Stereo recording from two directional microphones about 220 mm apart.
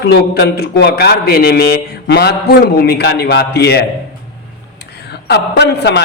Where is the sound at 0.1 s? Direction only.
45° left (ahead or behind).